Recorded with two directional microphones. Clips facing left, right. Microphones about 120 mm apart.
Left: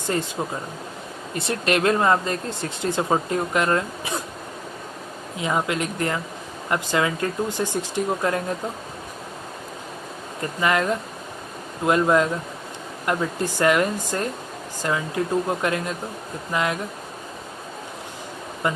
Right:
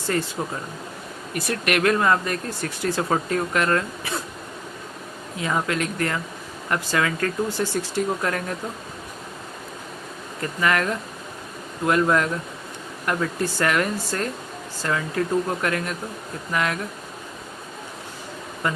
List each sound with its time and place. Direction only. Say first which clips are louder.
1.3 s speech: left 1 dB; 25° left (ahead or behind)
5.4 s speech: left 1 dB; 20° left (ahead or behind)
10.4 s speech: left 1 dB; 20° left (ahead or behind)
18.6 s speech: left 1 dB; 20° left (ahead or behind)